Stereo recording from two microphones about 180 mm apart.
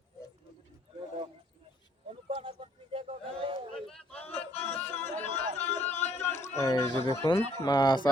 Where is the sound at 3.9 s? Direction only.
5° left (ahead or behind).